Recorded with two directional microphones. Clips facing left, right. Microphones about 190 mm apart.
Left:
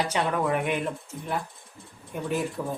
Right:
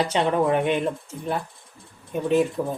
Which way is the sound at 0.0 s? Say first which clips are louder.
Right 5 dB; 25° right (ahead or behind).